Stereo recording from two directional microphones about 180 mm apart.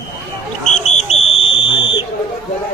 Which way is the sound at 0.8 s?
35° left (ahead or behind).